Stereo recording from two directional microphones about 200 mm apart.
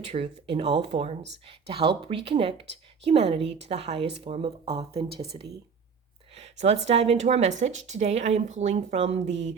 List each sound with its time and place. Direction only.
0.1 s a woman's voice: 30° right (ahead or behind)
6.3 s a sound: 35° right (ahead or behind)
6.8 s a woman's voice: 30° right (ahead or behind)